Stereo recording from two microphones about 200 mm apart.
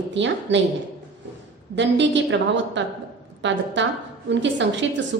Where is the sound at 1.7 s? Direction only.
65° right (ahead or behind).